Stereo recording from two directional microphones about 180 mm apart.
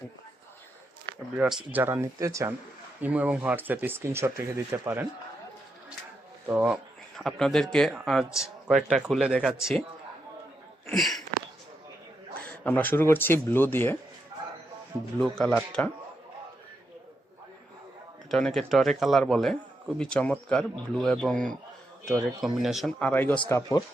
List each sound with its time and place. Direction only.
1.4 s speech: 5° right (ahead or behind)
6.5 s speech: 10° right (ahead or behind)
7.2 s a man's voice: centre (ahead or behind)
10.8 s speech: centre (ahead or behind)
12.4 s speech: 10° left (ahead or behind)
15.2 s a man's voice: 5° left (ahead or behind)
18.3 s a man's voice: centre (ahead or behind); by 23.8 s 20° left (ahead or behind)